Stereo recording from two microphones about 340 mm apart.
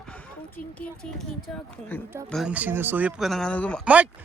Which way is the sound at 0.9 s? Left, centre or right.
Centre.